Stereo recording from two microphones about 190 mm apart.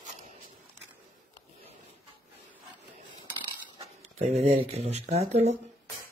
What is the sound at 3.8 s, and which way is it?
Speech, 35° right (ahead or behind).